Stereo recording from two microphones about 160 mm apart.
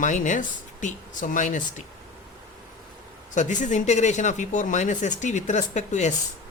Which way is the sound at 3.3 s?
50° left (ahead or behind).